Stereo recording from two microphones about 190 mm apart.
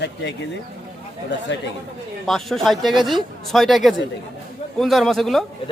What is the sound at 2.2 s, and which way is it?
A man's voice, centre (ahead or behind).